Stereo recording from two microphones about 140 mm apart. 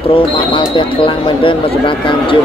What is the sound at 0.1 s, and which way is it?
Speech, 35° left (ahead or behind).